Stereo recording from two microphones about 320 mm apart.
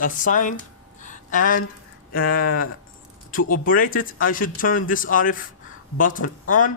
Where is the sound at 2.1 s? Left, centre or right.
Left.